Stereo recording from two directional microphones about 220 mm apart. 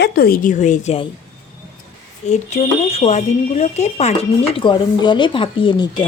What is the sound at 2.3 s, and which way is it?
Speech, 30° left (ahead or behind).